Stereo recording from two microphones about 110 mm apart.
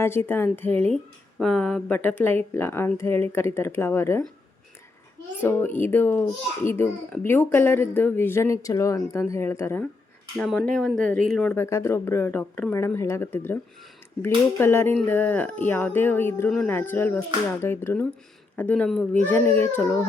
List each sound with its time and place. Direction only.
0.0 s speech: 20° left (ahead or behind)
5.4 s speech: 20° left (ahead or behind)
10.3 s speech: 10° left (ahead or behind)
11.5 s speech: 25° left (ahead or behind)
12.7 s speech: 25° left (ahead or behind)